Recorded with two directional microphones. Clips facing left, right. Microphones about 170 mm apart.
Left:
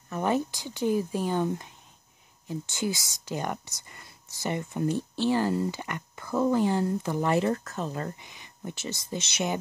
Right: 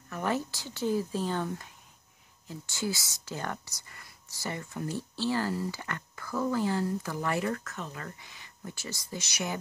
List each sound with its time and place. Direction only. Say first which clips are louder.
0.1 s speech: left 4 dB; 20° left (ahead or behind)
8.2 s speech: left 4 dB; 20° left (ahead or behind)